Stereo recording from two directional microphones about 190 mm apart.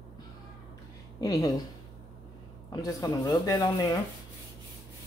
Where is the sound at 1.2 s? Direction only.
15° left (ahead or behind).